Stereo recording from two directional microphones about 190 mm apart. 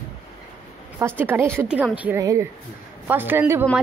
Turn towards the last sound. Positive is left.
turn(degrees=-10)  # may be behind; listen again after turning